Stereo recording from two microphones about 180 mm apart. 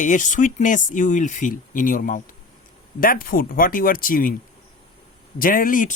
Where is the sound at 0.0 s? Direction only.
45° left (ahead or behind).